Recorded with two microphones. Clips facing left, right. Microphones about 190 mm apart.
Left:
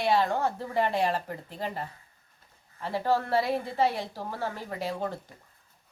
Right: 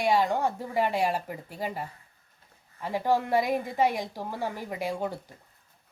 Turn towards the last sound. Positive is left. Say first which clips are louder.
# right 1 dB
turn(degrees=-10)  # may be behind; listen again after turning